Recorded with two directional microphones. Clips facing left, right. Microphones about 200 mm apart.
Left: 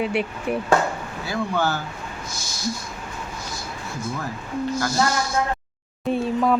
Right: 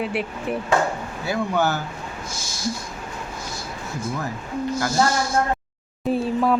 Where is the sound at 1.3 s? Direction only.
20° right (ahead or behind).